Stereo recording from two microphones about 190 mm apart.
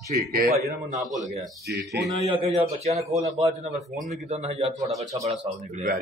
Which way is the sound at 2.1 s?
30° right (ahead or behind).